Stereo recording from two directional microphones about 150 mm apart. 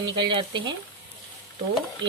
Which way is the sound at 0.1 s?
35° right (ahead or behind).